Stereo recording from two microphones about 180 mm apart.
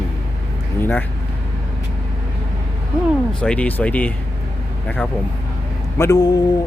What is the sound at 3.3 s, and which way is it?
Speech, 5° left (ahead or behind).